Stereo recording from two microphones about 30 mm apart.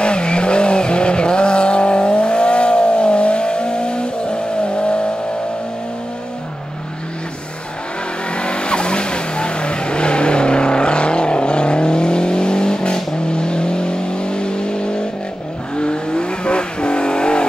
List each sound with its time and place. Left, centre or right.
0.0 s vehicle: left
8.3 s vehicle: left